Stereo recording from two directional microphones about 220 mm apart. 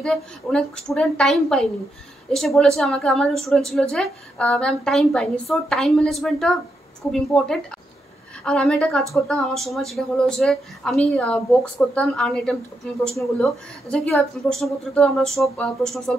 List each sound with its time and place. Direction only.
0.0 s a woman's voice: 5° left (ahead or behind)